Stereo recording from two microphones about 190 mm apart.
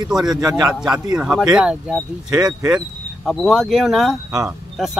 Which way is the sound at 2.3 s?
15° right (ahead or behind).